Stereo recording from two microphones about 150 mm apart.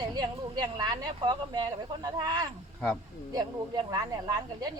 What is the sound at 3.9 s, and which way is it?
Speech, 25° right (ahead or behind).